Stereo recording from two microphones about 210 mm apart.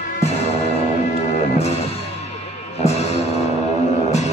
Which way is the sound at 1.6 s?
30° left (ahead or behind).